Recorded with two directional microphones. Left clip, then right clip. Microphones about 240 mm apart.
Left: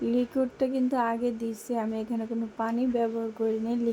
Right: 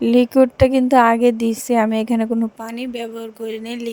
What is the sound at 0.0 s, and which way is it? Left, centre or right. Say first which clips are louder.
A woman's voice: right 14 dB; right.